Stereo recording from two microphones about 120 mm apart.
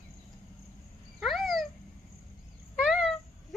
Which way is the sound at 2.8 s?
5° left (ahead or behind).